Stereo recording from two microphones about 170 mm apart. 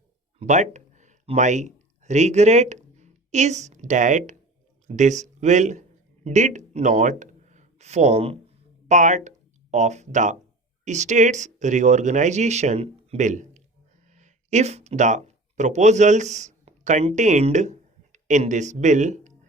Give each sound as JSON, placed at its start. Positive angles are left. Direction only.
{"t": 0.3, "sound": "speech", "side_deg": -40}